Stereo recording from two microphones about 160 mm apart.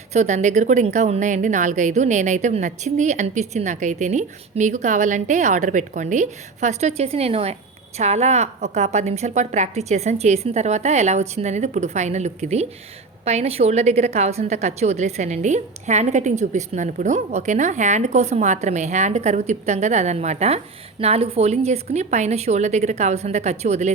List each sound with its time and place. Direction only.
0.1 s a woman's voice: 45° right (ahead or behind)